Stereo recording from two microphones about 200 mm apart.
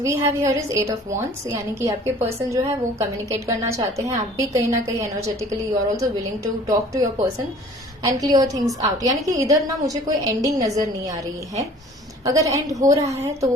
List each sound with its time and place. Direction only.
0.0 s a woman's voice: 15° right (ahead or behind)
8.0 s a woman's voice: 15° right (ahead or behind)